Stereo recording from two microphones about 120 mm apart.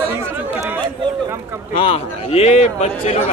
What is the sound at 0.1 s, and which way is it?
Chatter, 20° right (ahead or behind).